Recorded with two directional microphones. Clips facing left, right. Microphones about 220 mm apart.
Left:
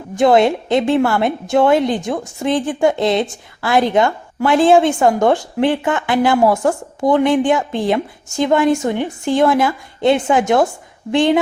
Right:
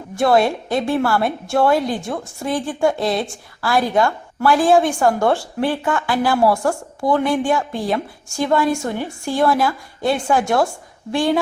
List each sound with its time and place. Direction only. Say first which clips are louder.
0.2 s a woman's voice: left 4 dB; 20° left (ahead or behind)